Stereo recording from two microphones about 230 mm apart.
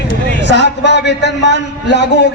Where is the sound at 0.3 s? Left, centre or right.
Left.